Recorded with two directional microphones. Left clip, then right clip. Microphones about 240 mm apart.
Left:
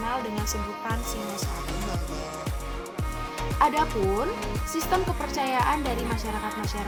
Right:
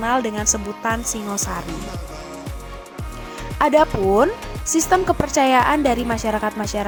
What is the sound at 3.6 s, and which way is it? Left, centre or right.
A woman's voice, right.